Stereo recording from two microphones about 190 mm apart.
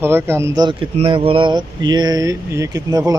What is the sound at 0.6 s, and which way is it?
Speech, 25° right (ahead or behind).